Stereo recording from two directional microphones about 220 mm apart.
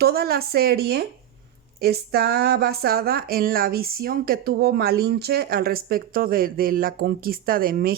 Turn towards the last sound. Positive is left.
turn(degrees=-40)  # may be behind; listen again after turning